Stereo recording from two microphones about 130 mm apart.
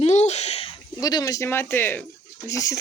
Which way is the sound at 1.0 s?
30° left (ahead or behind).